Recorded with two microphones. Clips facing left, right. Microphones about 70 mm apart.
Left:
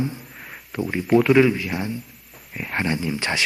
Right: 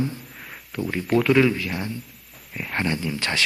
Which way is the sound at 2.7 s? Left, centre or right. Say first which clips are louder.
Left 2 dB; centre.